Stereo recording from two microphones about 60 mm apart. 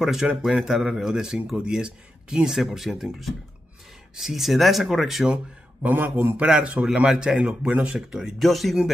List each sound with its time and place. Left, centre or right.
0.0 s speech: centre
5.3 s a man's voice: right
6.4 s speech: centre
8.4 s speech: centre